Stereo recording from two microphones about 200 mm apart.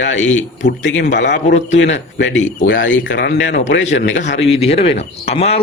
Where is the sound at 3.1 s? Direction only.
60° left (ahead or behind).